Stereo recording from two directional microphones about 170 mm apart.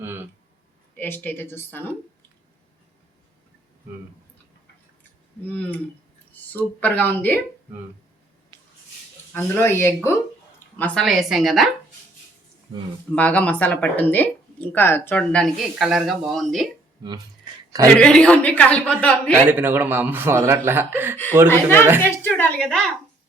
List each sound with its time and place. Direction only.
0.9 s speech: 10° left (ahead or behind)
5.4 s speech: 10° left (ahead or behind)
9.3 s a woman's voice: 15° left (ahead or behind)
13.1 s speech: 10° left (ahead or behind)
17.0 s a sound: 25° right (ahead or behind)
17.8 s speech: 5° left (ahead or behind)
19.5 s speech: 10° right (ahead or behind)
21.5 s speech: 15° left (ahead or behind)